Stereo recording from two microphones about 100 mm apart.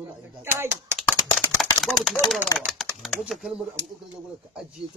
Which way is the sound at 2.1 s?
Centre (ahead or behind).